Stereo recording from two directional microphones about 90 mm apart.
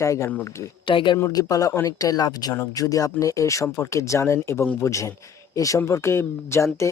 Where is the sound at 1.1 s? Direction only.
35° left (ahead or behind).